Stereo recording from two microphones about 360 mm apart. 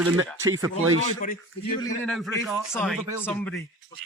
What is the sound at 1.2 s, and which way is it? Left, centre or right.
Speech, left.